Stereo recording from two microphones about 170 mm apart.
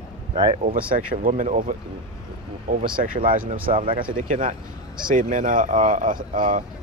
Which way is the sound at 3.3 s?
55° right (ahead or behind).